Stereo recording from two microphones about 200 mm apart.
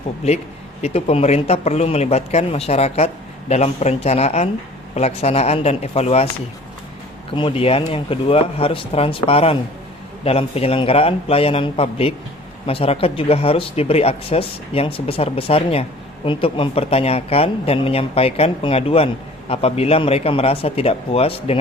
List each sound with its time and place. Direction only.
0.8 s a man's voice: 30° left (ahead or behind)
7.3 s speech: 25° left (ahead or behind)